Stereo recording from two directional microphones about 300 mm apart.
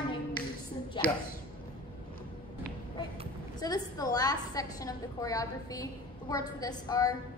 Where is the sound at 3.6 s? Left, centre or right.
Centre.